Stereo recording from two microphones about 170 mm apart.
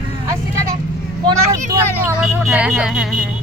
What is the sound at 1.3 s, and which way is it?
Speech, 20° right (ahead or behind).